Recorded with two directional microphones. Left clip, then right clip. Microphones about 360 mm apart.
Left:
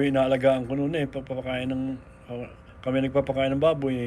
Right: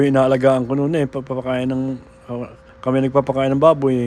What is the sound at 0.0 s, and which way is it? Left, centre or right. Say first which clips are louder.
Speech: right 7 dB; centre.